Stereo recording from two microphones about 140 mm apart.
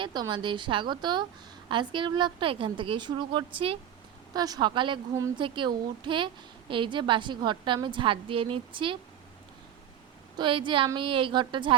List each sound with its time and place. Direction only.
0.0 s a woman's voice: 35° right (ahead or behind)
10.3 s a woman's voice: 35° right (ahead or behind)